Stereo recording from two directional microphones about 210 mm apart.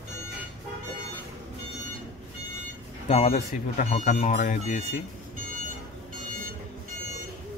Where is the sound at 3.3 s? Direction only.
40° left (ahead or behind).